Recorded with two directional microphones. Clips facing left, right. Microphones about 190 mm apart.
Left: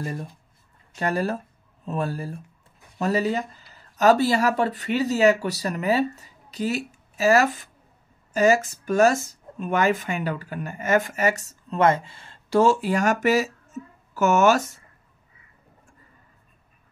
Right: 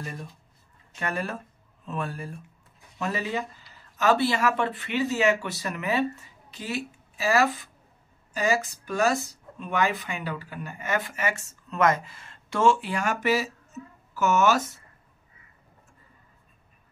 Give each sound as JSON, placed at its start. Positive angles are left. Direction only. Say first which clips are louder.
{"t": 0.0, "sound": "speech", "louder": "left 6 dB", "side_deg": 35}